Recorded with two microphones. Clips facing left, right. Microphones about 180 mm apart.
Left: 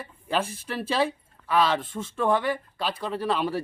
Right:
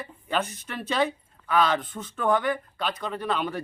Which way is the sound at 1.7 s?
25° left (ahead or behind).